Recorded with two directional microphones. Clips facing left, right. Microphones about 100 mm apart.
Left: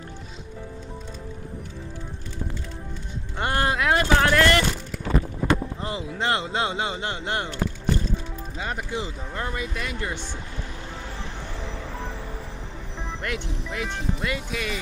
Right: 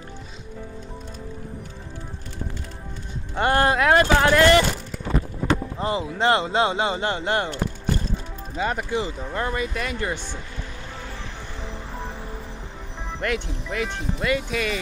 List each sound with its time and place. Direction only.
3.3 s speech: 55° right (ahead or behind)
4.2 s speech: 20° right (ahead or behind)
5.9 s speech: 25° right (ahead or behind)
7.0 s speech: 45° right (ahead or behind)
8.5 s speech: 60° right (ahead or behind)
13.2 s speech: 70° right (ahead or behind)